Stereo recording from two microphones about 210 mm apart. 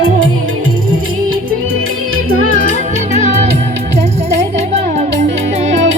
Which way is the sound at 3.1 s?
35° right (ahead or behind).